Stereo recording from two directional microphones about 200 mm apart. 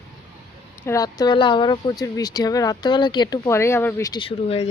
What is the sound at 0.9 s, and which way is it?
Speech, 15° left (ahead or behind).